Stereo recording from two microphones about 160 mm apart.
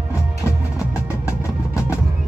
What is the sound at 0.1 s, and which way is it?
Music, 20° left (ahead or behind).